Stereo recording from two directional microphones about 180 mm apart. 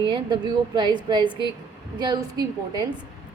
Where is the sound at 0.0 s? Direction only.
25° right (ahead or behind).